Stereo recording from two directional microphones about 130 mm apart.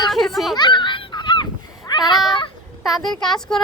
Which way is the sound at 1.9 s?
30° left (ahead or behind).